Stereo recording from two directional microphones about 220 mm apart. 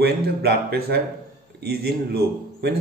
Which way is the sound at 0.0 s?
45° right (ahead or behind).